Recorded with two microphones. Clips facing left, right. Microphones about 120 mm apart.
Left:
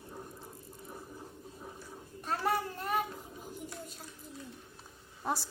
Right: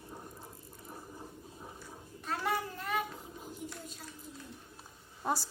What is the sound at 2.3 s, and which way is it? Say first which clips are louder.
Child singing: left 2 dB; 35° left (ahead or behind).